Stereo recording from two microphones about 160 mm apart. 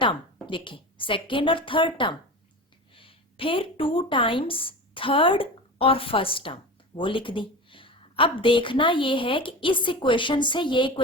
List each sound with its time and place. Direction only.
0.0 s a woman's voice: 30° left (ahead or behind)